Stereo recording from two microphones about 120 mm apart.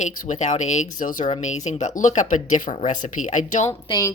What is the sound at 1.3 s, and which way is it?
Speech, 80° left.